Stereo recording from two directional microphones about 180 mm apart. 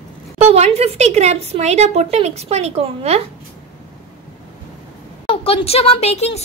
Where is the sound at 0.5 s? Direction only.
35° right (ahead or behind).